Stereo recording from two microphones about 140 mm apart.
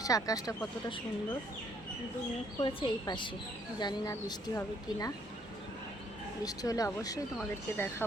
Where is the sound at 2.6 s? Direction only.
30° left (ahead or behind).